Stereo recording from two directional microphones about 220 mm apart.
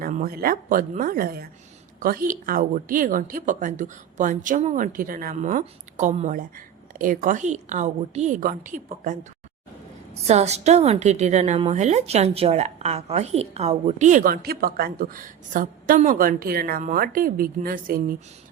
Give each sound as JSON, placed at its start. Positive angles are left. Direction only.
{"t": 0.0, "sound": "a woman's voice", "side_deg": -40}
{"t": 10.2, "sound": "a woman's voice", "side_deg": -30}